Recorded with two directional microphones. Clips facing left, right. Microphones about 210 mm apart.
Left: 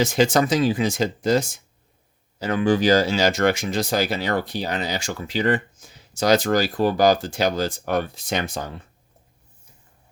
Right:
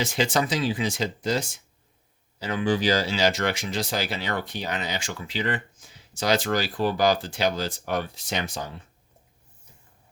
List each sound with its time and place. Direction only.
0.0 s speech: 45° left (ahead or behind)